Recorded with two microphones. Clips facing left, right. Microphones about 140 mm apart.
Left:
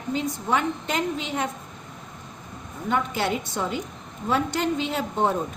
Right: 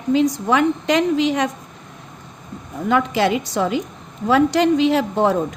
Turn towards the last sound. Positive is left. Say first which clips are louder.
# right 7 dB
turn(degrees=-90)